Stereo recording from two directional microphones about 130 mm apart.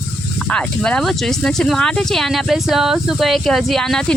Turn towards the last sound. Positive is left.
turn(degrees=5)  # may be behind; listen again after turning